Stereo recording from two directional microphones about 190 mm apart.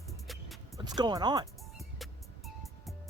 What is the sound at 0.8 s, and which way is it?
Speech, 20° right (ahead or behind).